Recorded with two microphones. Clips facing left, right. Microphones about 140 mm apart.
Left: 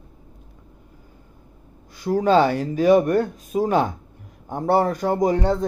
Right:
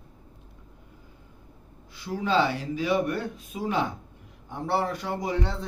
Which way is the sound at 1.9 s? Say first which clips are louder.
Left 9 dB; 45° left (ahead or behind).